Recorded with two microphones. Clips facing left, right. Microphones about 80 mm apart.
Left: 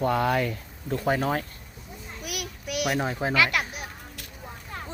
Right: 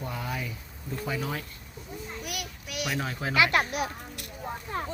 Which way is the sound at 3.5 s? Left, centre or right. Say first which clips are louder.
Right 3 dB; right.